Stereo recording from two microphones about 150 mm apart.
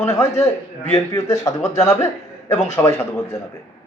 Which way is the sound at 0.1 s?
20° left (ahead or behind).